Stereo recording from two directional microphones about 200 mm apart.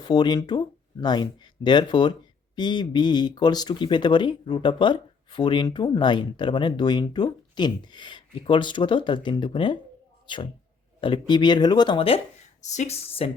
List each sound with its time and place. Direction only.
0.0 s speech: 20° left (ahead or behind)